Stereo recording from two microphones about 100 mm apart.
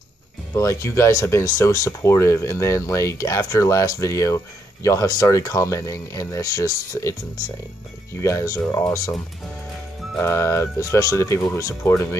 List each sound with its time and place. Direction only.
0.6 s speech: 30° left (ahead or behind)